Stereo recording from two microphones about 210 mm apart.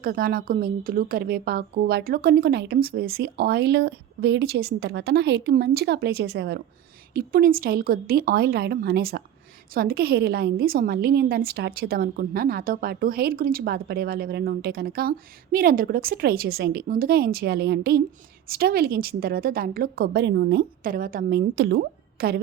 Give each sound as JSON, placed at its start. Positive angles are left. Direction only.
{"t": 0.0, "sound": "a woman's voice", "side_deg": -45}